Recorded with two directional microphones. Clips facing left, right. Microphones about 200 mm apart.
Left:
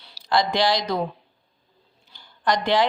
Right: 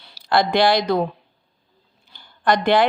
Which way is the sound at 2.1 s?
55° right (ahead or behind).